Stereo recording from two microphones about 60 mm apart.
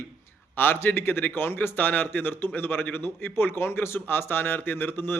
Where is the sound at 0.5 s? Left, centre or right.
Left.